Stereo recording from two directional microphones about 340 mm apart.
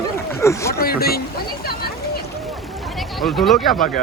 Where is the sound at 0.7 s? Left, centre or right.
Left.